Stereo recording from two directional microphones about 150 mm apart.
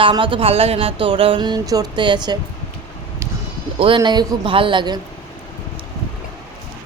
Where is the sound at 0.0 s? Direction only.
35° right (ahead or behind).